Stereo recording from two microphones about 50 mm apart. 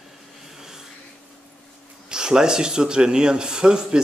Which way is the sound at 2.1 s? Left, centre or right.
Centre.